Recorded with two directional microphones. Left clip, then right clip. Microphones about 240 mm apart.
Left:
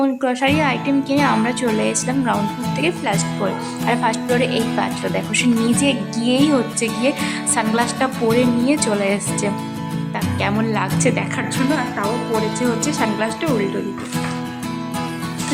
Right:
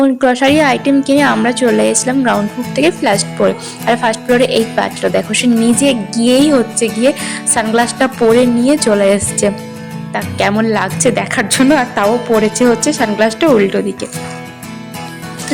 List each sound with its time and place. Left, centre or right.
0.0 s a woman's voice: centre; by 12.0 s right
12.5 s a woman's voice: centre